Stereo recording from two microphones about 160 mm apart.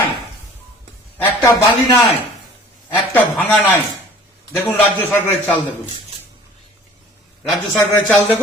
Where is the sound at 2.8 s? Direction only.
10° left (ahead or behind).